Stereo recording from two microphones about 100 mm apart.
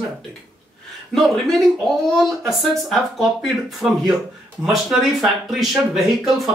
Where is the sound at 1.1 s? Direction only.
Centre (ahead or behind).